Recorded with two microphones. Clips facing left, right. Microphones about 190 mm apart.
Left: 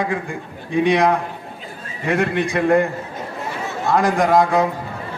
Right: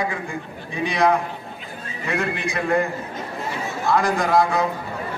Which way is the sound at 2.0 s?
40° left (ahead or behind).